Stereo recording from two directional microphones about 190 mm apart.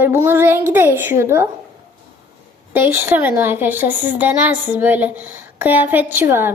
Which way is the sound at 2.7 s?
10° right (ahead or behind).